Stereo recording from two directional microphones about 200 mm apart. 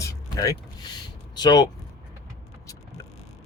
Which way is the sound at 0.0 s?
15° left (ahead or behind).